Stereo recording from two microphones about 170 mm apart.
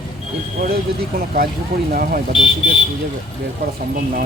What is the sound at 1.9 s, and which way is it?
Speech, 55° right (ahead or behind).